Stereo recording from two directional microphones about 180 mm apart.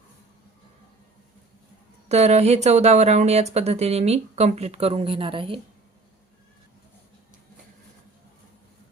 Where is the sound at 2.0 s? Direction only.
35° right (ahead or behind).